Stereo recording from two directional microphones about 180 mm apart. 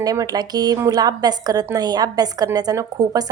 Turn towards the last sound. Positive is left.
turn(degrees=-20)  # may be behind; listen again after turning